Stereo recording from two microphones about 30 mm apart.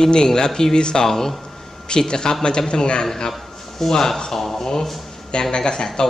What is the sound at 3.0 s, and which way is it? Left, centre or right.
Speech, centre.